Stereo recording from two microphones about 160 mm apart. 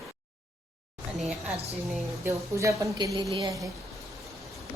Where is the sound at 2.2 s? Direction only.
20° right (ahead or behind).